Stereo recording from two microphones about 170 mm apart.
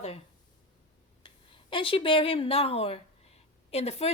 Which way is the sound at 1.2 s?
30° left (ahead or behind).